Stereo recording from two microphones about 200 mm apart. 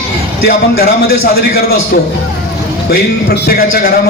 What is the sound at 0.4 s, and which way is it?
Speech, 50° left (ahead or behind).